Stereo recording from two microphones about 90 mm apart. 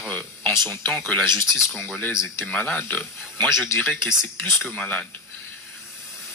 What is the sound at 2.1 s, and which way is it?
Speech, 30° left (ahead or behind).